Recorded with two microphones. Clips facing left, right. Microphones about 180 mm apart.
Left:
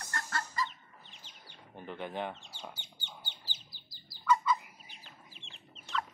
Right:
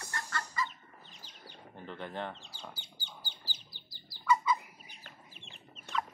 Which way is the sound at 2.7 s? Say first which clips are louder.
Even; 35° right (ahead or behind).